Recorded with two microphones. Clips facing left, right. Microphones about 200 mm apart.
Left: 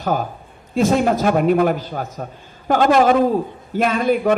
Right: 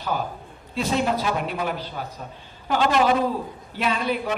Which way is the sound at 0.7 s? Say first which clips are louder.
Left 7 dB; 50° left (ahead or behind).